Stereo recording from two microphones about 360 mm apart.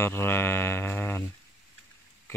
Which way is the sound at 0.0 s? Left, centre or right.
Centre.